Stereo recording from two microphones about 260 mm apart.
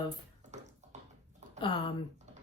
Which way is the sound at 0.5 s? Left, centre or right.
Right.